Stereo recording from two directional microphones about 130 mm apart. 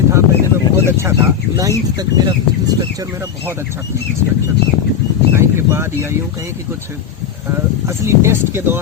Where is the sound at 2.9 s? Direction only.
30° right (ahead or behind).